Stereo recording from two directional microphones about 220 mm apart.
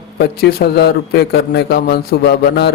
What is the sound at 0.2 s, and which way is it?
Speech, 45° left (ahead or behind).